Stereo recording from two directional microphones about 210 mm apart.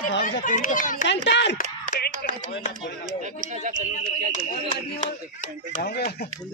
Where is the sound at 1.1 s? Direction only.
55° left (ahead or behind).